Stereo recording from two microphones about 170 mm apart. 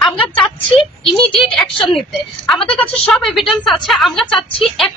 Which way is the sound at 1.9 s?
Centre (ahead or behind).